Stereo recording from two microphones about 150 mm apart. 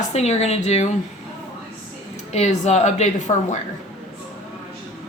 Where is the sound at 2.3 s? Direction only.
50° left (ahead or behind).